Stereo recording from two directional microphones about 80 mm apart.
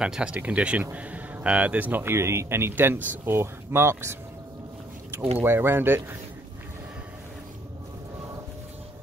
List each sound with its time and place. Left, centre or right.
0.0 s speech: centre
2.1 s speech: right